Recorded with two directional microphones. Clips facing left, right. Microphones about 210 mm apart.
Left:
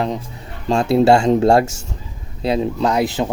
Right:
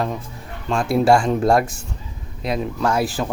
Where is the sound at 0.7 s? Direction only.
25° left (ahead or behind).